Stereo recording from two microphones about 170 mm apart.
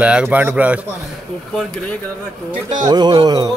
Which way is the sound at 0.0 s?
5° right (ahead or behind).